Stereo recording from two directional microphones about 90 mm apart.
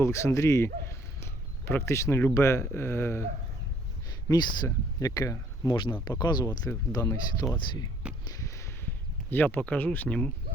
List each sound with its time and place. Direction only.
0.0 s speech: 35° left (ahead or behind)
4.3 s speech: 50° left (ahead or behind)
6.1 s speech: 55° left (ahead or behind)
7.0 s speech: 30° left (ahead or behind)
8.3 s a sound: 35° left (ahead or behind)
9.3 s speech: 20° left (ahead or behind)
10.1 s speech: 10° left (ahead or behind)